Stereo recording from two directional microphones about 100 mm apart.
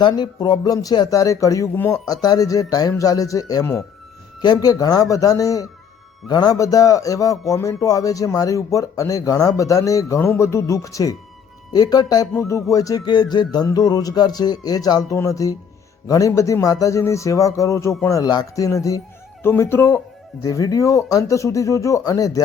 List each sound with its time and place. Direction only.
0.0 s speech: 45° left (ahead or behind)
1.7 s speech: 20° left (ahead or behind)
2.0 s speech: 40° left (ahead or behind)
12.3 s speech: 30° left (ahead or behind)
19.4 s speech: 25° left (ahead or behind)
20.4 s speech: 35° left (ahead or behind)